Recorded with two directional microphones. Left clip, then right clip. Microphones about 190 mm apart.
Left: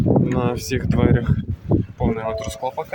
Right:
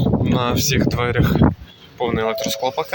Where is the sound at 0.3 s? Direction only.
20° left (ahead or behind).